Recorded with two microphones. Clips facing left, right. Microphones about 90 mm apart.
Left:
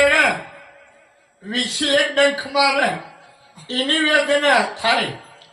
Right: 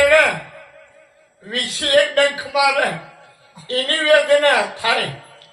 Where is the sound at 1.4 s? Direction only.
15° left (ahead or behind).